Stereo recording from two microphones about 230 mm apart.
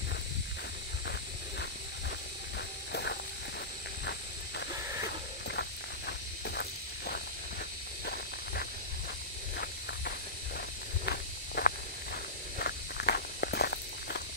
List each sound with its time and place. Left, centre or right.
2.9 s walk: left
5.5 s walk: left
8.0 s snake: left
11.1 s walk: left